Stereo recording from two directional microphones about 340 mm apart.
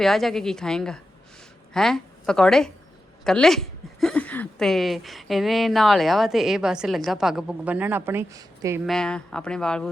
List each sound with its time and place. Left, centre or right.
0.0 s a woman's voice: centre